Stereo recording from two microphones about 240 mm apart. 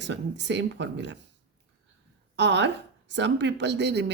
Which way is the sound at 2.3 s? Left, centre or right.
Right.